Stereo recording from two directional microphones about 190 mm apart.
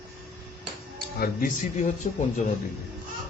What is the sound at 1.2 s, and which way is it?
A man's voice, 45° left (ahead or behind).